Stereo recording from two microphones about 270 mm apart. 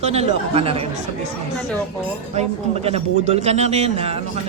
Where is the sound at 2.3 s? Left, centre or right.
Right.